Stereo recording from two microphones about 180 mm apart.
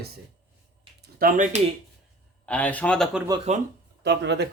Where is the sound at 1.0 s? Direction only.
50° right (ahead or behind).